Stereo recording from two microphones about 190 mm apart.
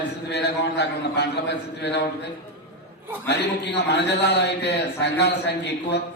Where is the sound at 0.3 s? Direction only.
65° left (ahead or behind).